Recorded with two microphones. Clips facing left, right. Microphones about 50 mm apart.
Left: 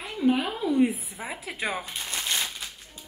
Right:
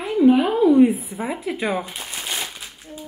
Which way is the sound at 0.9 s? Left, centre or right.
Centre.